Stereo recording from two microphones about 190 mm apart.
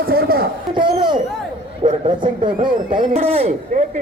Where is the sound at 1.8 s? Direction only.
25° right (ahead or behind).